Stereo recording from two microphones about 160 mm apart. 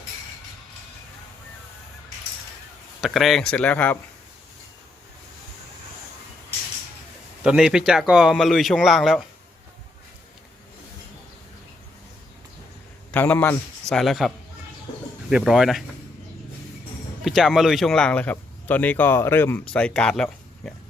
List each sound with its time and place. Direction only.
3.0 s speech: centre (ahead or behind)
7.4 s speech: 5° right (ahead or behind)
13.1 s a man's voice: 10° left (ahead or behind)
13.9 s speech: centre (ahead or behind)
17.2 s speech: centre (ahead or behind)